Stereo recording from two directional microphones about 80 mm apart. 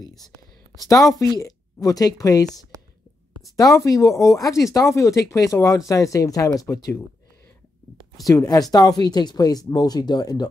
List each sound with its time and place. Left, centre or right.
0.8 s speech: left
8.3 s speech: left